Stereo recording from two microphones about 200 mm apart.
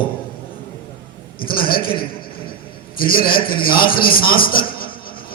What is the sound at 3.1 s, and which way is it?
A man's voice, 45° left (ahead or behind).